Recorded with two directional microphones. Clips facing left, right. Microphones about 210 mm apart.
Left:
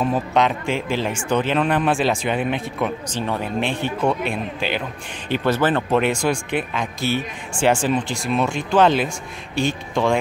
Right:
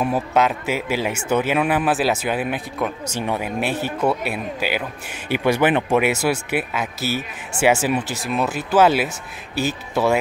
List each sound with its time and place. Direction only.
0.0 s speech: 5° right (ahead or behind)